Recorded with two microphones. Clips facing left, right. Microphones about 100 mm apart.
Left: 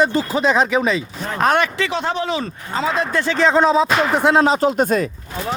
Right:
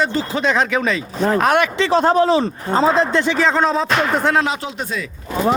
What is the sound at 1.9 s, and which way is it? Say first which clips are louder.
Speech: right 8 dB; 40° right (ahead or behind).